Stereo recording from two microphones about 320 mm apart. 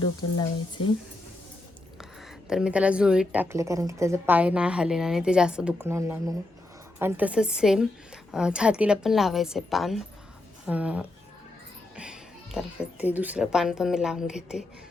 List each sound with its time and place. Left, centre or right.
0.3 s speech: centre
2.5 s a woman's voice: centre
11.9 s a sound: centre
13.1 s a woman's voice: centre